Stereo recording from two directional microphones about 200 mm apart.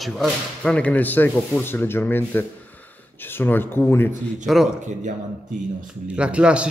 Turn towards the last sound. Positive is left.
turn(degrees=-5)  # may be behind; listen again after turning